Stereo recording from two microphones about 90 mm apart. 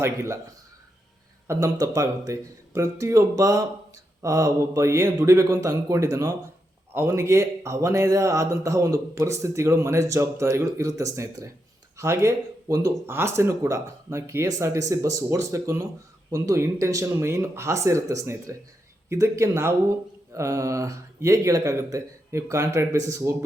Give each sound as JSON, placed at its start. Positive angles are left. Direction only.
{"t": 0.0, "sound": "speech", "side_deg": -35}
{"t": 1.5, "sound": "speech", "side_deg": -40}